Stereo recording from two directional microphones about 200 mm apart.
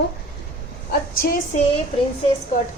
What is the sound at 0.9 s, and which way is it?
Speech, 50° left (ahead or behind).